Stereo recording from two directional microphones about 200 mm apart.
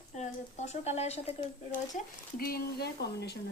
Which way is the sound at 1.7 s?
45° left (ahead or behind).